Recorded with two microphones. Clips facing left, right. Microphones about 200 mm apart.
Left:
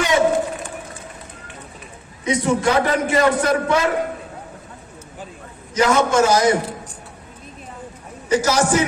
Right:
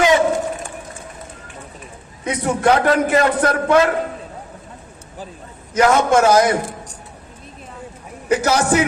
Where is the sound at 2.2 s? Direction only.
55° right (ahead or behind).